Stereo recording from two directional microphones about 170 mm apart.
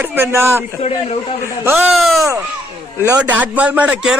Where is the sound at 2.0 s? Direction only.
Centre (ahead or behind).